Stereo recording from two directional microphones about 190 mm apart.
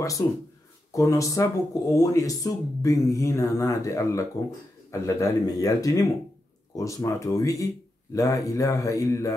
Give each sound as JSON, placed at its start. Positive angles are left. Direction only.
{"t": 0.9, "sound": "speech", "side_deg": 15}